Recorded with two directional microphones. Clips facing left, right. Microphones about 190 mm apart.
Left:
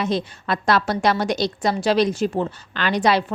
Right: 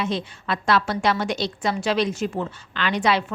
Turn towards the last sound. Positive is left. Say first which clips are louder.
# left 3 dB
turn(degrees=35)  # may be behind; listen again after turning